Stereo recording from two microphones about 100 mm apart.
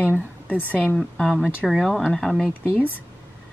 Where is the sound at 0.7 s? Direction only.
5° left (ahead or behind).